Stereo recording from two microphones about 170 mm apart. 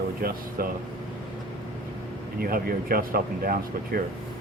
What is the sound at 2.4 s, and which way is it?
Speech, 60° right (ahead or behind).